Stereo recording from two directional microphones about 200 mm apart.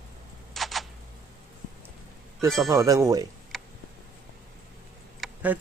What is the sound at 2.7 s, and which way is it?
Speech, 15° right (ahead or behind).